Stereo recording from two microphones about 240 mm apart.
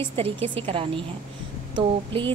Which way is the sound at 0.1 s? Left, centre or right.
Right.